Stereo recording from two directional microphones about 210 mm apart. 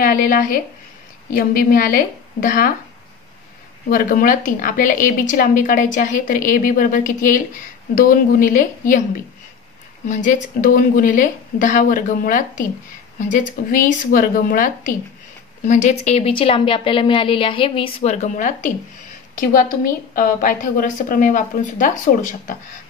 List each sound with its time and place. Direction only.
0.0 s a woman's voice: 40° left (ahead or behind)
3.9 s a woman's voice: 40° left (ahead or behind)
10.0 s a woman's voice: 35° left (ahead or behind)
13.7 s a woman's voice: 40° left (ahead or behind)